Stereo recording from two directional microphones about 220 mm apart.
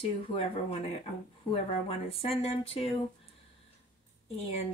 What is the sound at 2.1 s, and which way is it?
Speech, 25° left (ahead or behind).